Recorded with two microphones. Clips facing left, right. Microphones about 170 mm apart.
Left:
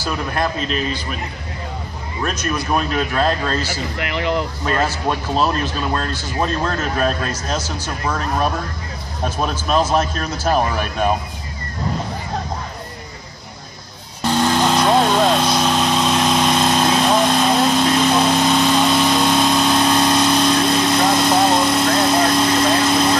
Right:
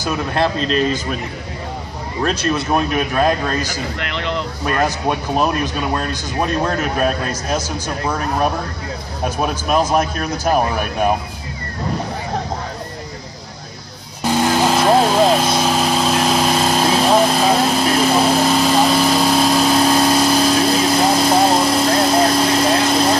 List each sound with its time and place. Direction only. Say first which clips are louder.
0.0 s a man's voice: right 3 dB; 25° right (ahead or behind)
2.2 s speech: right 3 dB; 30° right (ahead or behind)
4.0 s speech: left 5 dB; 10° left (ahead or behind)
4.6 s speech: right 3 dB; 15° right (ahead or behind)
14.2 s vehicle: right 1 dB; 10° right (ahead or behind)